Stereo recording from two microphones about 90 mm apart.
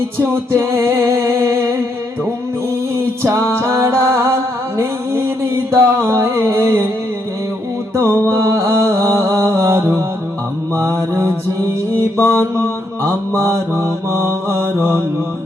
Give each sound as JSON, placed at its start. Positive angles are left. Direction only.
{"t": 0.2, "sound": "music", "side_deg": -30}
{"t": 2.9, "sound": "a capella", "side_deg": -35}
{"t": 3.6, "sound": "music", "side_deg": -30}
{"t": 4.8, "sound": "a sound", "side_deg": -30}
{"t": 7.9, "sound": "music", "side_deg": -30}
{"t": 12.3, "sound": "mantra", "side_deg": -30}